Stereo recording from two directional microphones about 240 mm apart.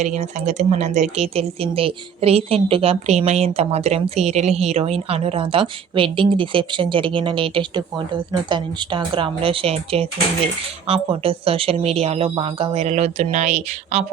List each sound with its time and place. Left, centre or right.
0.0 s speech: right